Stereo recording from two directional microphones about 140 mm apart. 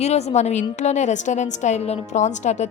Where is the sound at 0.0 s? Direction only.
50° left (ahead or behind).